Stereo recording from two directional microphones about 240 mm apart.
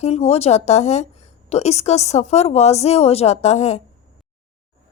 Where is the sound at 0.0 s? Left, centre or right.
Left.